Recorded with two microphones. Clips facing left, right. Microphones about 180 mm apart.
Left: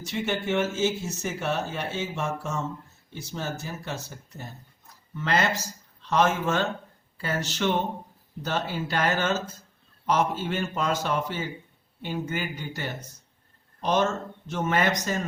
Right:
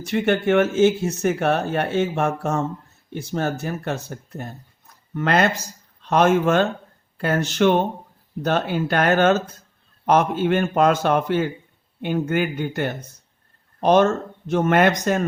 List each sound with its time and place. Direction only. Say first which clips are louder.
0.0 s speech: right 9 dB; 60° right (ahead or behind)